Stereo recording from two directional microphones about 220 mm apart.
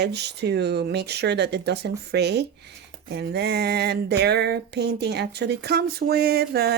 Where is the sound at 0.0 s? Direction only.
50° right (ahead or behind).